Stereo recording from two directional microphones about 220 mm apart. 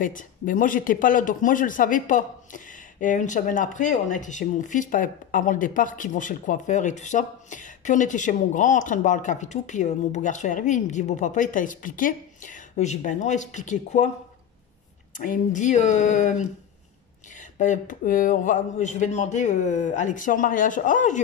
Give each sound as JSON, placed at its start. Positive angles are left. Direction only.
{"t": 0.0, "sound": "a man's voice", "side_deg": 35}
{"t": 15.1, "sound": "a man's voice", "side_deg": 35}